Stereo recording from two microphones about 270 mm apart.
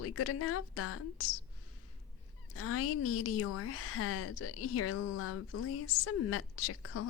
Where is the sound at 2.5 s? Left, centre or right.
Left.